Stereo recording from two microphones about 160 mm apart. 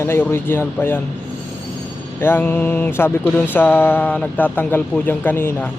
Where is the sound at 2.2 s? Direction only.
15° left (ahead or behind).